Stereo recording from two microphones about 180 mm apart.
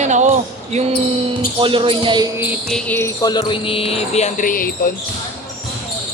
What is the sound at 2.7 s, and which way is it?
Speech, 5° left (ahead or behind).